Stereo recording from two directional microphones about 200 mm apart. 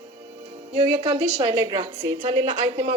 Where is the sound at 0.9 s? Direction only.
30° right (ahead or behind).